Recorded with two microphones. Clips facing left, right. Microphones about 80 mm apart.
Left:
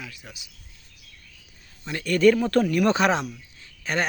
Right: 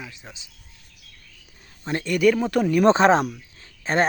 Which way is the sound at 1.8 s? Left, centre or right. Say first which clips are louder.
Right 6 dB; right.